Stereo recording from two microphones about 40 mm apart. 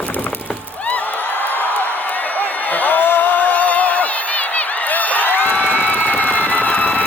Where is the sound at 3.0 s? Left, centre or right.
Left.